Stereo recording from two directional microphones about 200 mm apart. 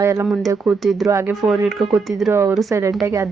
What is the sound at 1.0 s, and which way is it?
A woman's voice, 15° right (ahead or behind).